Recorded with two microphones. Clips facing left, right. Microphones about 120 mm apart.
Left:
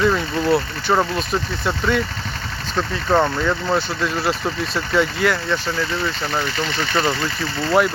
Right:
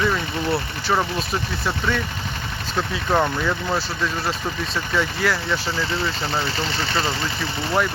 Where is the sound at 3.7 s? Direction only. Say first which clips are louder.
Left 3 dB; 5° left (ahead or behind).